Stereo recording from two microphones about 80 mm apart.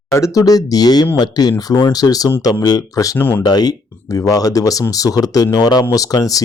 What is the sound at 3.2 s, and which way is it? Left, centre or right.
Speech, left.